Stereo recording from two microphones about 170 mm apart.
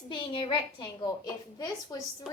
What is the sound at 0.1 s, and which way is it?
A woman's voice, 30° left (ahead or behind).